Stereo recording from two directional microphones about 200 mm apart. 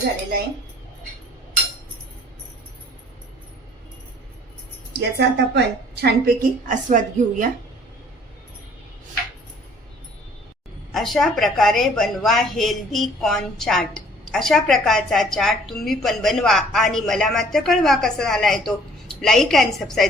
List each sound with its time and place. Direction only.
4.9 s a woman's voice: 55° right (ahead or behind); by 7.4 s 40° right (ahead or behind)
10.9 s a woman's voice: centre (ahead or behind)